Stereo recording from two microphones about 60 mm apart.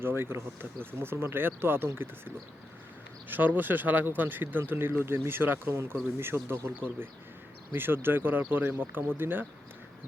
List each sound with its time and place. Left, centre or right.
0.0 s speech: right